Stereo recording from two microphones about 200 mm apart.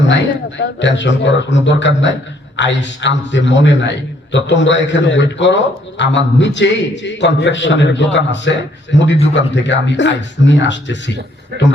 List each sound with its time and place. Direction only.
0.1 s a man's voice: 65° left (ahead or behind)